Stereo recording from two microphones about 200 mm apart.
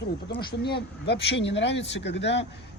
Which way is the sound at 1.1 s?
60° left (ahead or behind).